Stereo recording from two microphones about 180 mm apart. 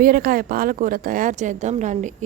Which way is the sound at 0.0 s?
55° right (ahead or behind).